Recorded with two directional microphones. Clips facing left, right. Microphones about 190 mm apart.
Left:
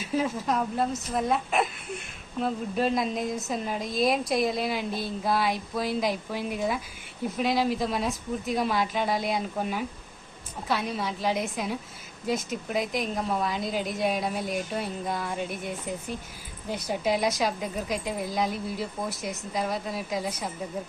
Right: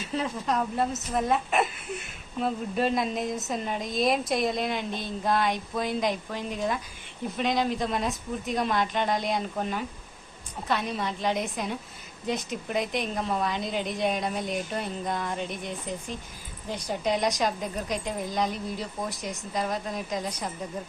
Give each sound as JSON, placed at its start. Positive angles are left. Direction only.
{"t": 0.1, "sound": "a woman's voice", "side_deg": 5}